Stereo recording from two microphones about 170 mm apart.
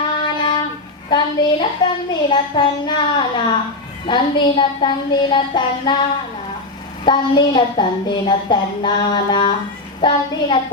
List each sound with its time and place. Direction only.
0.3 s a sound: 30° left (ahead or behind)
1.1 s a woman's voice: 25° left (ahead or behind)
7.0 s a woman's voice: 30° left (ahead or behind)